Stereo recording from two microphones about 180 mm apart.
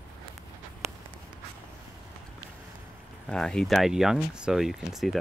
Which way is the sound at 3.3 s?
5° left (ahead or behind).